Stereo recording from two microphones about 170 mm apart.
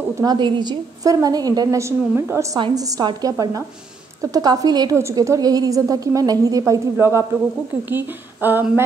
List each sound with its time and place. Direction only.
0.2 s a woman's voice: 25° right (ahead or behind)